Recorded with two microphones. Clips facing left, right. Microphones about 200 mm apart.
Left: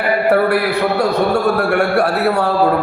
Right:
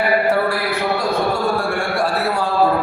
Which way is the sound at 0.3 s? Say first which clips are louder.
Left 5 dB; 60° left (ahead or behind).